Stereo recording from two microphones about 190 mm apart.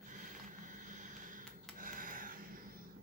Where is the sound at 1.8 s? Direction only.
45° right (ahead or behind).